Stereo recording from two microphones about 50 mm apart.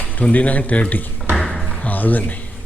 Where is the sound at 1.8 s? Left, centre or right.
Left.